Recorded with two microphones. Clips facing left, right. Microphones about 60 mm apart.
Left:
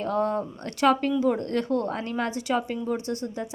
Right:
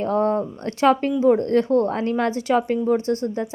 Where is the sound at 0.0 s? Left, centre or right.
Right.